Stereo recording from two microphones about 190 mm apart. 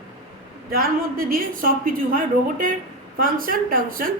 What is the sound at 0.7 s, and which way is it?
A woman's voice, 50° right (ahead or behind).